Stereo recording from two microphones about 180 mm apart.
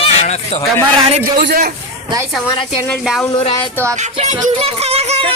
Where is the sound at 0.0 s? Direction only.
35° left (ahead or behind).